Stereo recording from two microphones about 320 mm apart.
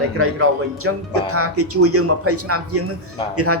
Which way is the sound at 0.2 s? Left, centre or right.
Right.